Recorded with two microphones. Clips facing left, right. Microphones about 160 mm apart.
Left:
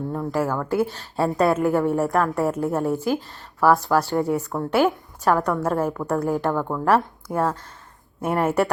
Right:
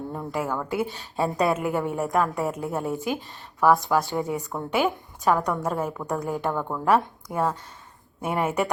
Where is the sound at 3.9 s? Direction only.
5° right (ahead or behind).